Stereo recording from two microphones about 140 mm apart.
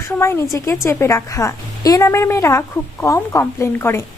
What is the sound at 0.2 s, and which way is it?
A woman's voice, 20° left (ahead or behind).